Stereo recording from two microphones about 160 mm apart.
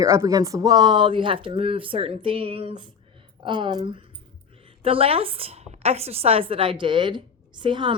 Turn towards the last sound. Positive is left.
turn(degrees=-30)  # may be behind; listen again after turning